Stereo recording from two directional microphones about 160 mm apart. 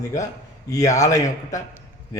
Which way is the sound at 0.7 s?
20° left (ahead or behind).